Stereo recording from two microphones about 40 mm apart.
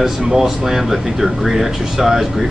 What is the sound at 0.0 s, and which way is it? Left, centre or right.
A man's voice, centre.